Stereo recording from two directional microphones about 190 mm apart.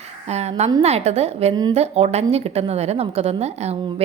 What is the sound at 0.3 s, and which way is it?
A woman's voice, 35° right (ahead or behind).